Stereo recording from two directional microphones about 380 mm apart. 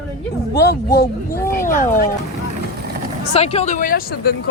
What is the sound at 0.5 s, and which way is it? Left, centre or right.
Speech, left.